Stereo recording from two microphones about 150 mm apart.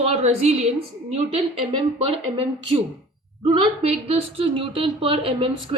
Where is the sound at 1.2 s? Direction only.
35° right (ahead or behind).